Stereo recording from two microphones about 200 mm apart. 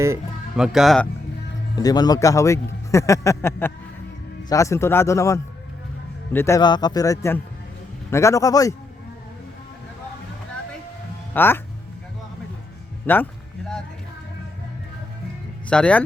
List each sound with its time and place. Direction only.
0.5 s speech: 5° right (ahead or behind)
1.7 s a man's voice: 20° left (ahead or behind)
11.3 s a man's voice: 10° left (ahead or behind)
13.1 s a man's voice: 10° left (ahead or behind)
15.7 s speech: 5° left (ahead or behind)